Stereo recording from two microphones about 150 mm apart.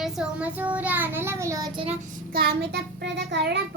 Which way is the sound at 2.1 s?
90° right.